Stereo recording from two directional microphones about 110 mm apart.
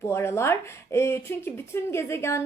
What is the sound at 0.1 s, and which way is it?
Speech, 25° left (ahead or behind).